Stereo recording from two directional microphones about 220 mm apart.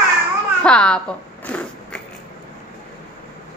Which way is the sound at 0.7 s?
5° left (ahead or behind).